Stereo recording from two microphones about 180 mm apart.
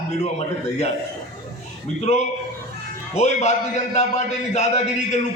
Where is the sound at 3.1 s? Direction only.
40° left (ahead or behind).